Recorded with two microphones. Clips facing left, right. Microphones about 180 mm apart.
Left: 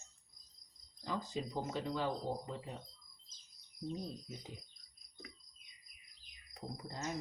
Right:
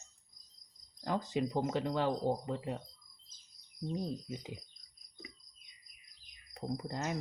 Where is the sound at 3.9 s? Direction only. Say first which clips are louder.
Right 6 dB; 85° right.